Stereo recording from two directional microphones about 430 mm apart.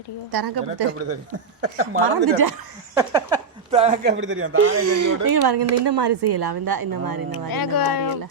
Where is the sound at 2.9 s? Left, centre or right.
Centre; by 4.9 s right.